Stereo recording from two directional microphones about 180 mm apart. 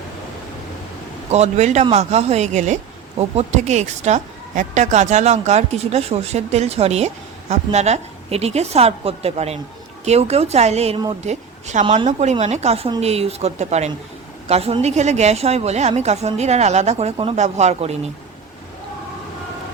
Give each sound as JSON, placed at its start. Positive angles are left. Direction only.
{"t": 1.3, "sound": "a woman's voice", "side_deg": -40}